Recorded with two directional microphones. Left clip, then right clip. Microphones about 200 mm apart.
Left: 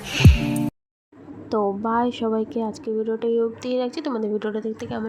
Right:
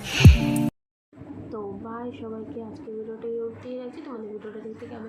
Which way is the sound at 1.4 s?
55° left (ahead or behind).